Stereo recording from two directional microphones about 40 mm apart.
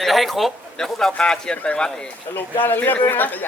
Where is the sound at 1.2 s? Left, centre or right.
Left.